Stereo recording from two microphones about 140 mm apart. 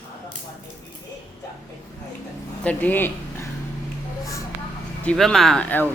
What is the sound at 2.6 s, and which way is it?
Speech, 10° left (ahead or behind).